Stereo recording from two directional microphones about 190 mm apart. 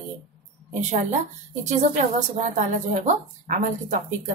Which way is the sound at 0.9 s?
40° right (ahead or behind).